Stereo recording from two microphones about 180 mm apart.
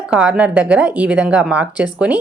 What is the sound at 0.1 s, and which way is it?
Speech, 5° right (ahead or behind).